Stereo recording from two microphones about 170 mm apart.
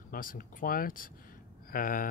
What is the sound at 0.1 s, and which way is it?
Speech, 55° left (ahead or behind).